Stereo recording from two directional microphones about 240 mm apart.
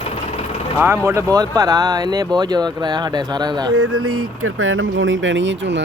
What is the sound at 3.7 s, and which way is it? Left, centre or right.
Speech, right.